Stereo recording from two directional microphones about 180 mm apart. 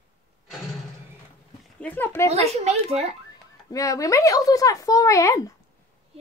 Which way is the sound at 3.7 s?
20° left (ahead or behind).